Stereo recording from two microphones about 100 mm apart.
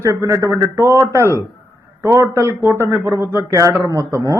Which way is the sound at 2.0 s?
30° right (ahead or behind).